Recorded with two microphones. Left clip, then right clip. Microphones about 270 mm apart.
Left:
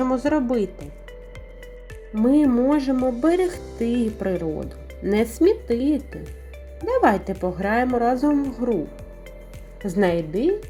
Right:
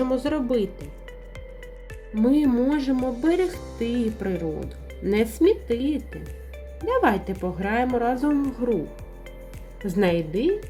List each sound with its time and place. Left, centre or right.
0.3 s speech: left
2.1 s a woman's voice: centre
9.8 s speech: centre